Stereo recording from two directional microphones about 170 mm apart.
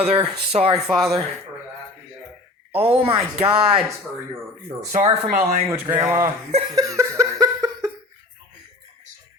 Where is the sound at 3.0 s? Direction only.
35° right (ahead or behind).